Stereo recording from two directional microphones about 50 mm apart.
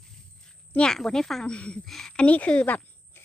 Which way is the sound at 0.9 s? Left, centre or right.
Centre.